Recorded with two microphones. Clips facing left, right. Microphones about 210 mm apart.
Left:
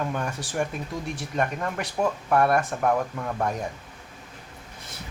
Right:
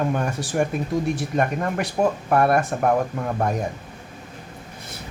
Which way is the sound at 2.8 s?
40° right (ahead or behind).